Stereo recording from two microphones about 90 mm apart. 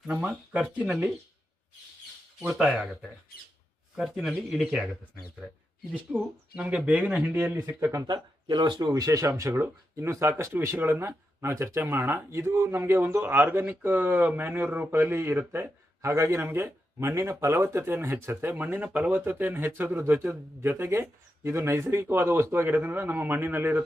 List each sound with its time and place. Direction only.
0.1 s speech: 15° right (ahead or behind)
2.4 s speech: 10° right (ahead or behind)
4.1 s speech: 10° right (ahead or behind)
5.9 s speech: 15° right (ahead or behind)
8.0 s speech: 55° right (ahead or behind)
9.0 s a man's voice: 40° right (ahead or behind); by 23.8 s 25° right (ahead or behind)